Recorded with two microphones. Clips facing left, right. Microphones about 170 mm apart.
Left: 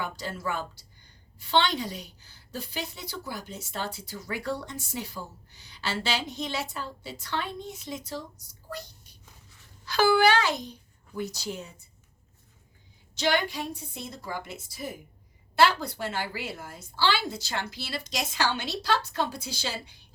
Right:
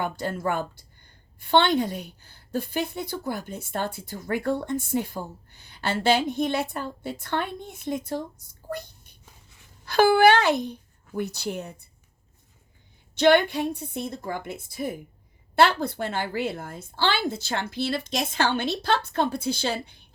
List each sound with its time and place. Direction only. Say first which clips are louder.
0.0 s a child's voice: right 6 dB; 55° right (ahead or behind)
13.1 s a woman's voice: right 8 dB; 60° right (ahead or behind)